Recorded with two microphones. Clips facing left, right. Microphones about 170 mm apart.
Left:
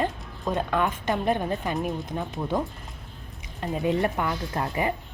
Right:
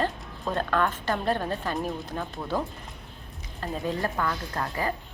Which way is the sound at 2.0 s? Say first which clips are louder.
Left 3 dB; 15° left (ahead or behind).